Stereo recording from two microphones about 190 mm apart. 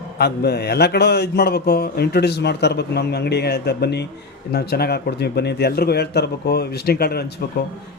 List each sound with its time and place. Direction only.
0.2 s a man's voice: 60° left (ahead or behind)